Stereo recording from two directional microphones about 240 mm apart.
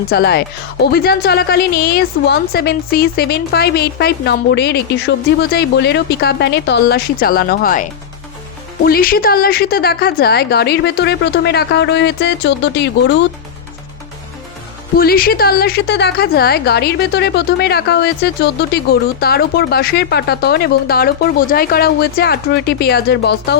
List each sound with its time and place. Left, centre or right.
0.1 s a woman's voice: left
14.9 s a woman's voice: left